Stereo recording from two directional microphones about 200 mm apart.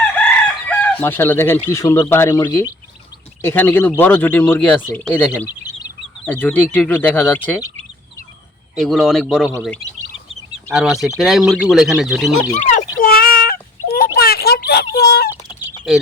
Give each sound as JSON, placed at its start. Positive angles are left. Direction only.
{"t": 0.4, "sound": "speech", "side_deg": 10}
{"t": 8.7, "sound": "speech", "side_deg": 0}
{"t": 13.0, "sound": "a sound", "side_deg": 45}